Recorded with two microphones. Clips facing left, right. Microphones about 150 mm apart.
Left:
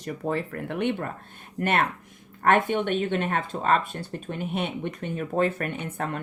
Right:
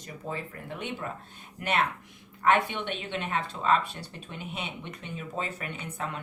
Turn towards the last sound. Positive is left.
turn(degrees=55)  # may be behind; listen again after turning